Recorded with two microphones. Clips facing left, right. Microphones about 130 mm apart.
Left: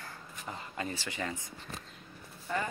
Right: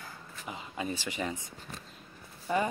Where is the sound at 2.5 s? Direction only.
15° right (ahead or behind).